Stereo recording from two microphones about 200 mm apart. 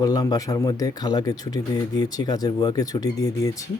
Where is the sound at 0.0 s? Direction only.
20° left (ahead or behind).